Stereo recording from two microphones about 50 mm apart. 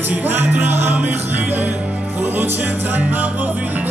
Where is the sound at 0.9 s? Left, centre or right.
Right.